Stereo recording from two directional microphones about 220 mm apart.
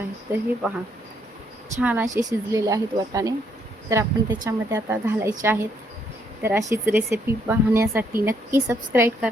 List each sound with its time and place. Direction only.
0.3 s speech: 10° right (ahead or behind)
1.8 s speech: 10° right (ahead or behind)